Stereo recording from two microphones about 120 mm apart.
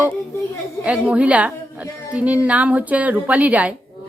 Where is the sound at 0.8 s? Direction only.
10° right (ahead or behind).